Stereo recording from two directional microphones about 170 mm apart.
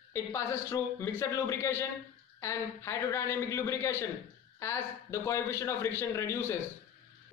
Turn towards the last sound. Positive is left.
turn(degrees=15)  # may be behind; listen again after turning